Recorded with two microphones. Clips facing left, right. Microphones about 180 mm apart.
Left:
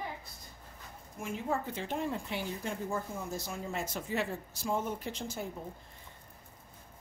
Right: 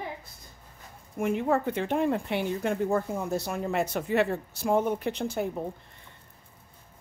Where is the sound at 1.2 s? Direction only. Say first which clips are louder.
Right 9 dB; 65° right (ahead or behind).